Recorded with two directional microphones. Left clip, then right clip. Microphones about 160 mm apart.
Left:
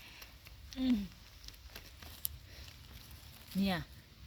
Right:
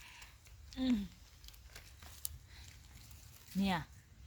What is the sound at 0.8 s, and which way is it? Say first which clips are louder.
Speech: left 2 dB; 25° right (ahead or behind).